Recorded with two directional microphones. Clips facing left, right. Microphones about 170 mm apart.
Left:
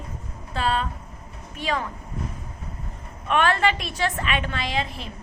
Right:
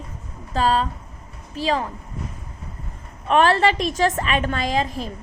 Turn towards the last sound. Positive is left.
turn(degrees=-40)  # may be behind; listen again after turning